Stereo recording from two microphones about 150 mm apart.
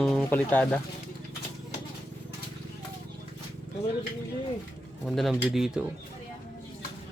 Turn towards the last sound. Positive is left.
turn(degrees=-5)  # may be behind; listen again after turning